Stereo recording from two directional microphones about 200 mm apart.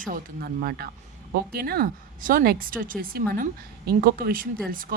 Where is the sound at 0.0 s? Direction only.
45° right (ahead or behind).